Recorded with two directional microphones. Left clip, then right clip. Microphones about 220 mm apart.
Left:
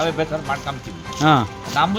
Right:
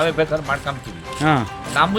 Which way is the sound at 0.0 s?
15° right (ahead or behind).